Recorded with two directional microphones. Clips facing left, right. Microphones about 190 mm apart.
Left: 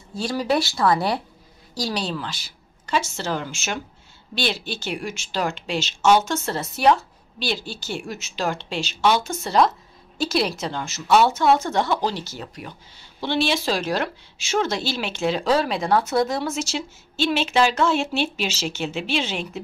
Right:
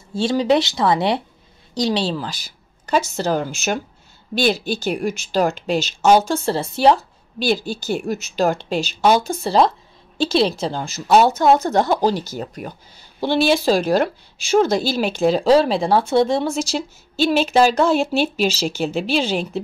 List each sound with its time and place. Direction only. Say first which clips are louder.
0.1 s a woman's voice: right 6 dB; 25° right (ahead or behind)